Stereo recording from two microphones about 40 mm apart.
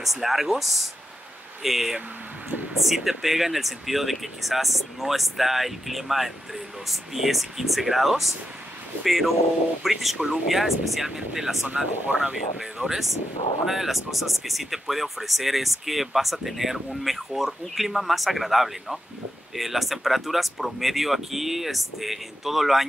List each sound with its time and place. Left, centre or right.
0.0 s speech: centre
11.6 s speech: right
12.7 s speech: centre